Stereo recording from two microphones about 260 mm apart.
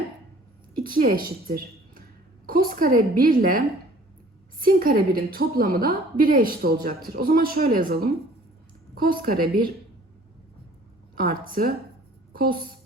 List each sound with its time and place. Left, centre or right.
0.9 s a woman's voice: right
4.6 s a woman's voice: right
11.2 s a woman's voice: right